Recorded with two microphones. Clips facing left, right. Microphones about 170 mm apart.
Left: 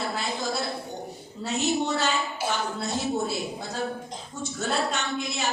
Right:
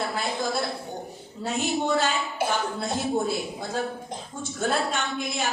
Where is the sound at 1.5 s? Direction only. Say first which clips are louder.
Even; 50° right (ahead or behind).